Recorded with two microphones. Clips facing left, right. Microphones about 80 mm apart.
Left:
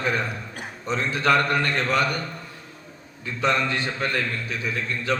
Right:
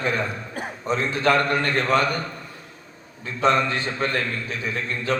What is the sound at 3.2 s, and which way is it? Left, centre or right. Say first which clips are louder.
A man's voice: right 3 dB; right.